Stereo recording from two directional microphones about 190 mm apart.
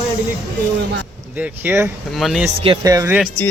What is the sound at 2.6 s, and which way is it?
Speech, 25° right (ahead or behind).